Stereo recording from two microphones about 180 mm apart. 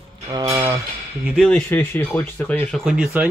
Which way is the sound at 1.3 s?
5° left (ahead or behind).